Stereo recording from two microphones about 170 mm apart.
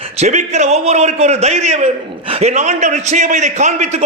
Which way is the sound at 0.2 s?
45° right (ahead or behind).